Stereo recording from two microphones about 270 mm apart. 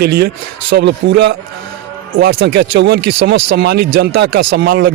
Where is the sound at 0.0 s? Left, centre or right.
Right.